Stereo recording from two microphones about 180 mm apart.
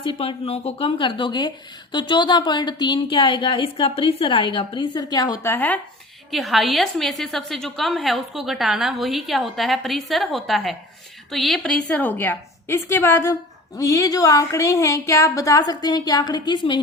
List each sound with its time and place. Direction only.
0.2 s a woman's voice: 35° left (ahead or behind)